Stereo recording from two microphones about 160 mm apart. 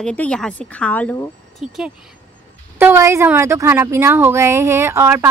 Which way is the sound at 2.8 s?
15° right (ahead or behind).